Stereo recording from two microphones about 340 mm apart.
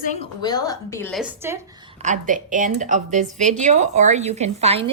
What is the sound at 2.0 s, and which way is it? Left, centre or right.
A woman's voice, right.